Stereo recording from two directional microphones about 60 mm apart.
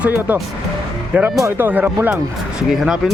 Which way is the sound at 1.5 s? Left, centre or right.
Right.